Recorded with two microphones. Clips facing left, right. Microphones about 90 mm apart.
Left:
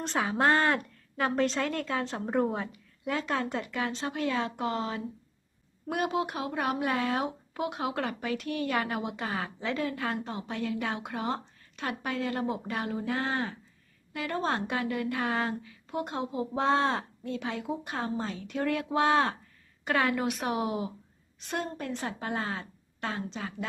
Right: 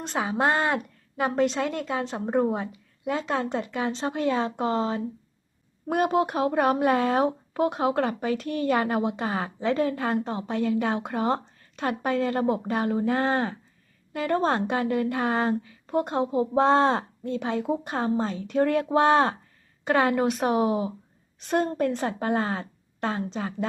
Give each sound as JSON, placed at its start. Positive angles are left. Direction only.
{"t": 0.0, "sound": "a woman's voice", "side_deg": -15}
{"t": 5.9, "sound": "a woman's voice", "side_deg": -40}
{"t": 21.4, "sound": "a woman's voice", "side_deg": -45}